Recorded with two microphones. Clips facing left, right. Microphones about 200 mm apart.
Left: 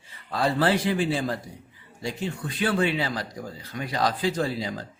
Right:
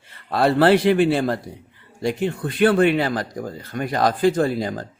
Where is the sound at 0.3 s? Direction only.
65° right (ahead or behind); by 4.9 s 50° right (ahead or behind).